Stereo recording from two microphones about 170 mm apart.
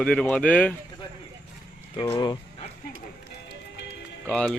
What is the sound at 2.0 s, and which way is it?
Speech, 25° left (ahead or behind).